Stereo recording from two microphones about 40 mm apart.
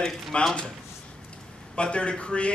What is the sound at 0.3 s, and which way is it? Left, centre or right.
Speech, left.